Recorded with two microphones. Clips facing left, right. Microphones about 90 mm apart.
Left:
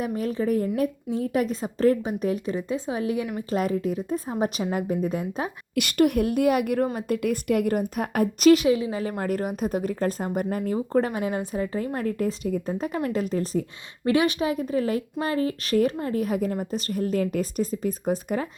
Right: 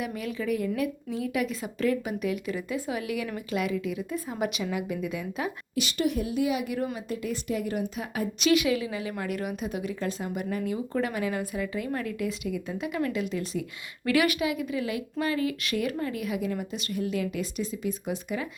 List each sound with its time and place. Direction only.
0.0 s a woman's voice: 35° left (ahead or behind)
5.7 s a woman's voice: 55° left (ahead or behind); by 18.4 s 40° left (ahead or behind)